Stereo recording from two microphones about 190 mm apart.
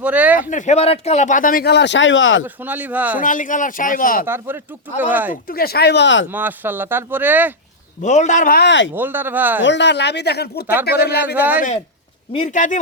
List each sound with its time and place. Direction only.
0.0 s speech: 10° right (ahead or behind)
0.3 s speech: 40° left (ahead or behind); by 2.4 s 85° left
2.6 s speech: 10° right (ahead or behind)
3.2 s speech: 45° left (ahead or behind)
4.3 s speech: 10° right (ahead or behind)
5.3 s speech: 50° left (ahead or behind); by 6.2 s 70° left (ahead or behind)
6.3 s speech: 10° right (ahead or behind)
8.0 s speech: 40° left (ahead or behind); by 8.9 s 70° left (ahead or behind)
9.0 s speech: 10° right (ahead or behind)
9.6 s speech: 65° left (ahead or behind)
11.3 s speech: 10° right (ahead or behind)
12.3 s speech: 35° left (ahead or behind)